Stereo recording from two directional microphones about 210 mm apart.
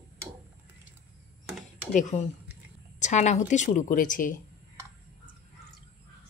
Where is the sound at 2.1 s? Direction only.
35° left (ahead or behind).